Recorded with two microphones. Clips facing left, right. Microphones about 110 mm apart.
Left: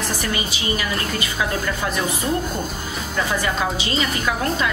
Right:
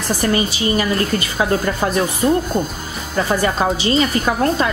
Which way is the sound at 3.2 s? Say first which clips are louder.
Right 5 dB; 35° right (ahead or behind).